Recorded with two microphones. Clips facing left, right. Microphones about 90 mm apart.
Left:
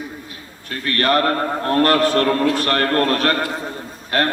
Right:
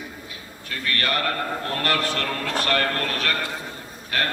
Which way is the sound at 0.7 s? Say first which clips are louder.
Left 8 dB; 40° left (ahead or behind).